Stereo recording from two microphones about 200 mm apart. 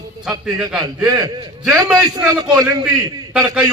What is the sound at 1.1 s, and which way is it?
Speech, 20° right (ahead or behind).